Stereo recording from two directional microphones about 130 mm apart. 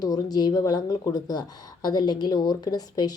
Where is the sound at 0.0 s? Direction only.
30° left (ahead or behind).